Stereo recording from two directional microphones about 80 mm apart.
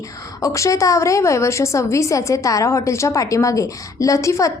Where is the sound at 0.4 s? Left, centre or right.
Left.